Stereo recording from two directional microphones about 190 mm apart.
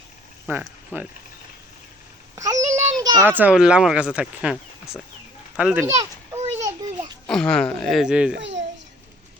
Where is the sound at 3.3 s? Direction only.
5° right (ahead or behind).